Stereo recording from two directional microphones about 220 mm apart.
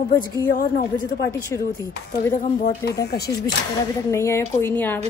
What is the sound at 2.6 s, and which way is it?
Speech, 45° left (ahead or behind).